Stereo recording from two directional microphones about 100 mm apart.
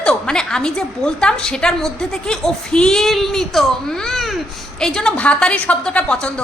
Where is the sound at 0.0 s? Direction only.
5° left (ahead or behind).